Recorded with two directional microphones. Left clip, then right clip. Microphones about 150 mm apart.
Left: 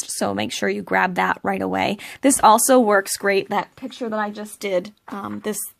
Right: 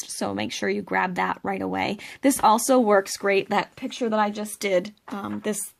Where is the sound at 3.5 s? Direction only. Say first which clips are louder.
Left 1 dB; 10° left (ahead or behind).